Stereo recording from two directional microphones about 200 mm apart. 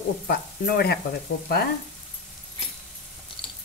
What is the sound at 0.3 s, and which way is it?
Speech, 50° left (ahead or behind).